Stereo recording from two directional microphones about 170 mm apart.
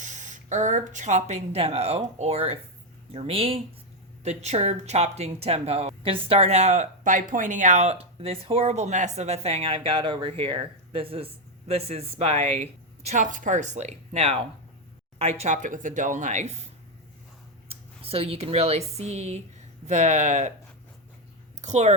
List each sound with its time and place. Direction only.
0.0 s speech: 45° right (ahead or behind)
17.7 s speech: 35° right (ahead or behind)
21.6 s speech: 40° right (ahead or behind)